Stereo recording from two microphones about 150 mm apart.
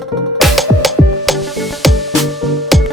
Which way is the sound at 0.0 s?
Centre (ahead or behind).